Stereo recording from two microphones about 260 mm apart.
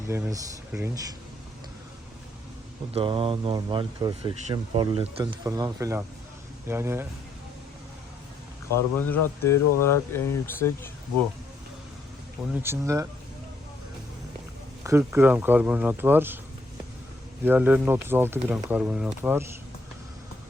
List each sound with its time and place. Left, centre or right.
0.1 s speech: centre
2.9 s speech: centre
8.7 s speech: centre
12.6 s speech: centre
14.8 s speech: centre
17.4 s speech: centre